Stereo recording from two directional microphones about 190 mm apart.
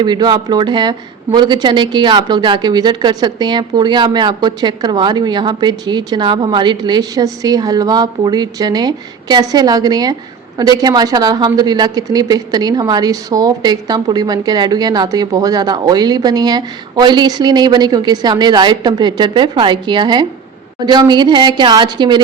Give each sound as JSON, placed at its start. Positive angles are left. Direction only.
{"t": 0.0, "sound": "speech", "side_deg": -20}